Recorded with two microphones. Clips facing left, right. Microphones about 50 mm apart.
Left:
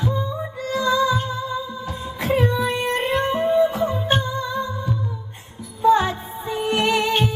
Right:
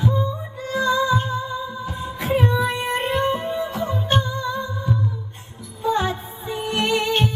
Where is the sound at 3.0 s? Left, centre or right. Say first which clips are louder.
Left 2 dB; centre.